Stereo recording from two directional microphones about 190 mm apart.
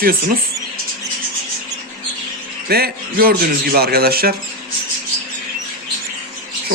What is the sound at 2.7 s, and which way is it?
A man's voice, 55° right (ahead or behind).